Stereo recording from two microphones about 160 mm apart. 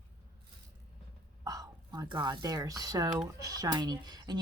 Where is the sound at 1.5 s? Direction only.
20° right (ahead or behind).